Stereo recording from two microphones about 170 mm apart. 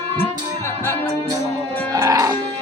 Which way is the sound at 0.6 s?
15° left (ahead or behind).